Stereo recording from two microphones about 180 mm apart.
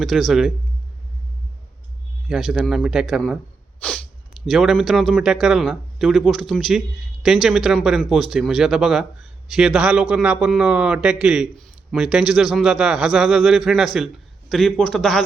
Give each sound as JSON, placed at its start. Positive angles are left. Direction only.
{"t": 0.0, "sound": "speech", "side_deg": 0}
{"t": 2.2, "sound": "speech", "side_deg": 0}
{"t": 3.8, "sound": "sneeze", "side_deg": 5}
{"t": 4.4, "sound": "speech", "side_deg": 0}